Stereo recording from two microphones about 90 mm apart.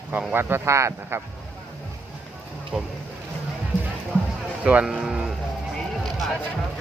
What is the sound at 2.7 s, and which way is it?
Speech, 15° right (ahead or behind).